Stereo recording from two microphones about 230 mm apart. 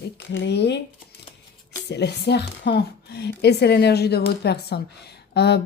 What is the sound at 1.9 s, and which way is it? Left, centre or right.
Speech, left.